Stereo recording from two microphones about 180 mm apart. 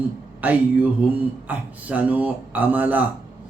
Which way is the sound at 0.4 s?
10° right (ahead or behind).